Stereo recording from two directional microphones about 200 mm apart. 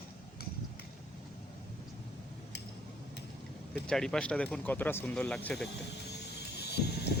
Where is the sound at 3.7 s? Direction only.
5° left (ahead or behind).